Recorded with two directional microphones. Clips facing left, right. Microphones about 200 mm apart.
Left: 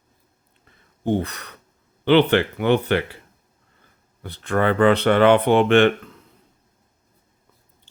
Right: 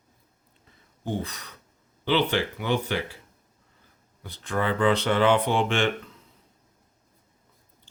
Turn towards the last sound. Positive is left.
turn(degrees=60)  # may be behind; listen again after turning